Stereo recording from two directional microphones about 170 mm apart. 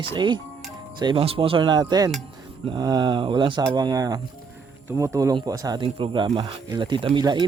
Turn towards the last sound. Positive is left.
turn(degrees=-25)  # may be behind; listen again after turning